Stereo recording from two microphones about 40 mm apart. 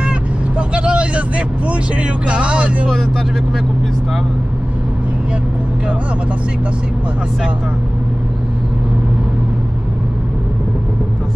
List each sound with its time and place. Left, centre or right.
0.6 s vehicle: right